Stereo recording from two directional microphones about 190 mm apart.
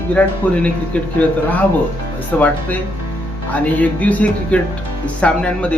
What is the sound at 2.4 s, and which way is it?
Speech, 10° left (ahead or behind).